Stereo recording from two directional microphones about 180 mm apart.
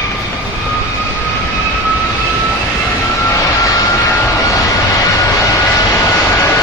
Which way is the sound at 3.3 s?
15° left (ahead or behind).